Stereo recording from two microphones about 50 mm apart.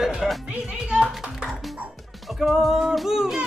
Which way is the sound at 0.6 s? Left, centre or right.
Centre.